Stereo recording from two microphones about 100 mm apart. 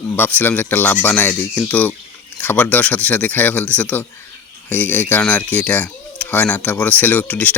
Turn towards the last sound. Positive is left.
turn(degrees=15)  # may be behind; listen again after turning